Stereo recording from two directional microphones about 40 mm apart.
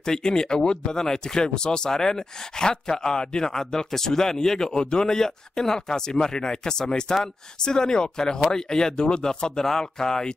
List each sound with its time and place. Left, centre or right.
0.0 s speech: centre